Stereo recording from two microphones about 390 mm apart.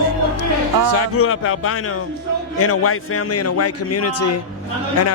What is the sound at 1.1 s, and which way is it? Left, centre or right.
A man's voice, left.